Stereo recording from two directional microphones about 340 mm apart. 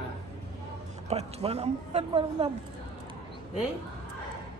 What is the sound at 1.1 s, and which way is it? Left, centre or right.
A woman's voice, centre.